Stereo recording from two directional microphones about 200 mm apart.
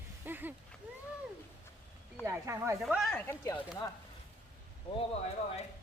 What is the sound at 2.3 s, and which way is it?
Speech, 15° right (ahead or behind).